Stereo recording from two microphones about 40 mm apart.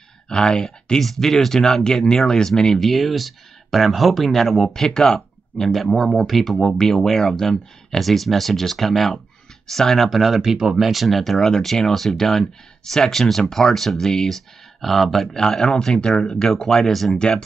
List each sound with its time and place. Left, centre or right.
0.3 s speech: centre
2.8 s speech: centre
10.9 s speech: centre
14.8 s speech: centre
15.4 s speech: centre
16.4 s speech: centre